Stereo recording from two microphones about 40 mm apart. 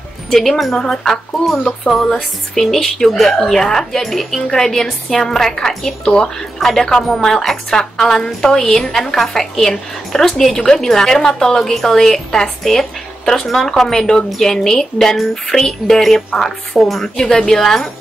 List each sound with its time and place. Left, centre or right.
0.3 s a woman's voice: centre
17.2 s a woman's voice: centre